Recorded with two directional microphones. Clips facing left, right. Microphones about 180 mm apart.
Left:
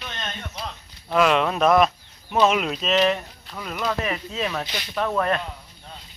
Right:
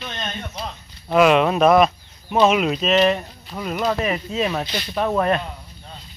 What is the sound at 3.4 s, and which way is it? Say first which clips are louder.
Speech: right 5 dB; 20° right (ahead or behind).